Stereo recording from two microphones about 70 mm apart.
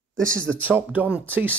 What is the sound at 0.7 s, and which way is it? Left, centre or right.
Speech, right.